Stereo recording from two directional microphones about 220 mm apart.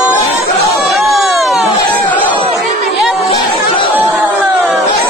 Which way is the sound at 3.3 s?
25° left (ahead or behind).